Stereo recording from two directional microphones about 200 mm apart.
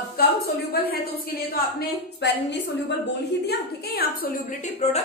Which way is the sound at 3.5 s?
50° left (ahead or behind).